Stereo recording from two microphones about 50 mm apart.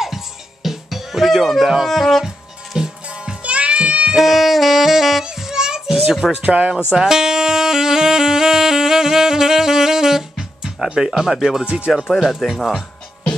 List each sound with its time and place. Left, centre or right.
0.0 s music: centre
1.9 s speech: centre
2.2 s music: centre
3.1 s music: centre
4.2 s saxophone: centre
5.2 s music: centre
6.4 s speech: right
6.9 s music: centre
11.1 s speech: centre